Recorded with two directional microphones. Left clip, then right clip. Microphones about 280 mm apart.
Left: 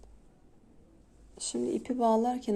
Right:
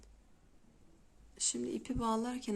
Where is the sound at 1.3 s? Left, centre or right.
Centre.